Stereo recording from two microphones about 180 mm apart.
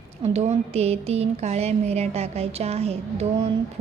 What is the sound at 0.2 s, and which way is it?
A woman's voice, 35° right (ahead or behind).